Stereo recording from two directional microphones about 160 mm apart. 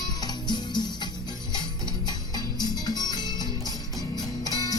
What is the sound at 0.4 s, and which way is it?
Music, 25° left (ahead or behind).